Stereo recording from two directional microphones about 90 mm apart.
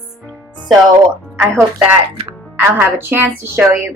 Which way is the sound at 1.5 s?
30° right (ahead or behind).